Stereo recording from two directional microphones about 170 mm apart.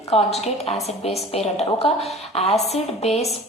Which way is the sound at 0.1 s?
35° left (ahead or behind).